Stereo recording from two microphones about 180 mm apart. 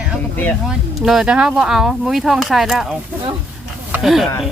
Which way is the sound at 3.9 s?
Centre (ahead or behind).